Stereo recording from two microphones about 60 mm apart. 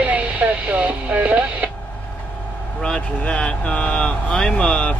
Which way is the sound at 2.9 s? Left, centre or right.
Centre.